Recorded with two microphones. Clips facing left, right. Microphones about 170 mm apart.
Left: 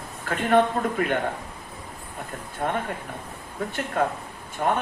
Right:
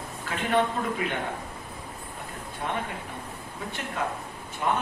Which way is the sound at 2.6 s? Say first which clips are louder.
Left 5 dB; 50° left (ahead or behind).